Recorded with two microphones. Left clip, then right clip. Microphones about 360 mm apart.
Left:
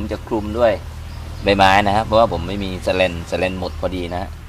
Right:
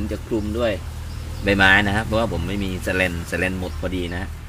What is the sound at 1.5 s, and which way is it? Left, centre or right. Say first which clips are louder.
Speech: left 3 dB; centre.